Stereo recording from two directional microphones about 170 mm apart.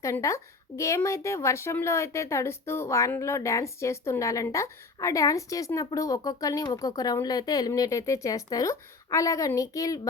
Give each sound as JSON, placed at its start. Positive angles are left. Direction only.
{"t": 0.0, "sound": "a woman's voice", "side_deg": 20}